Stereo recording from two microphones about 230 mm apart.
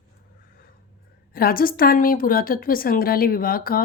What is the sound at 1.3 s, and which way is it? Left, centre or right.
Speech, left.